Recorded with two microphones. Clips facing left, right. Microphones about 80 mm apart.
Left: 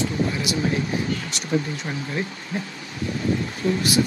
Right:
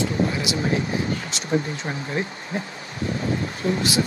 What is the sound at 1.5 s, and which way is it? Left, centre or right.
Speech, right.